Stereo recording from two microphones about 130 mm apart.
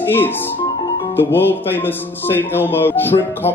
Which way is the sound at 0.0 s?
15° left (ahead or behind).